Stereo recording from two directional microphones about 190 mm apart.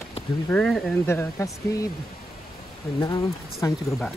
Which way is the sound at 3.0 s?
15° left (ahead or behind).